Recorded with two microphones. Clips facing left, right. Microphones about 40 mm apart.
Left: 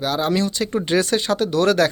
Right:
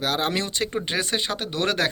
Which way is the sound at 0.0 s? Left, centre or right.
Right.